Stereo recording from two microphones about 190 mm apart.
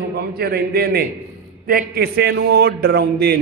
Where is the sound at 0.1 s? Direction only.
55° right (ahead or behind).